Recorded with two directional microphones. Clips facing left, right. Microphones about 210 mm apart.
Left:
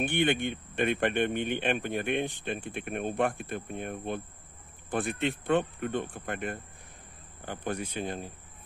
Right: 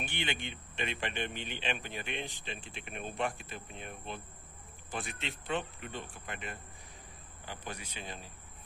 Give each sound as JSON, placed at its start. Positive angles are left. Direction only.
{"t": 0.0, "sound": "speech", "side_deg": 55}